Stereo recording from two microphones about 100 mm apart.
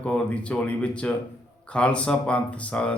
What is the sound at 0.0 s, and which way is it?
Speech, 10° left (ahead or behind).